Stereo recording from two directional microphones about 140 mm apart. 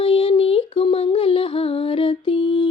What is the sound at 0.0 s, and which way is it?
Music, 40° left (ahead or behind).